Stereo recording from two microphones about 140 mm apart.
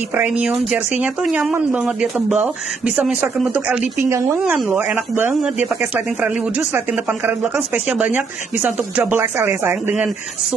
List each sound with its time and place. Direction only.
0.1 s speech: 10° right (ahead or behind)
4.0 s a woman's voice: 20° right (ahead or behind)